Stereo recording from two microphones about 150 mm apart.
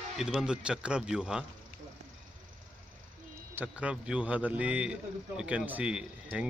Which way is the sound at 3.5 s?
10° right (ahead or behind).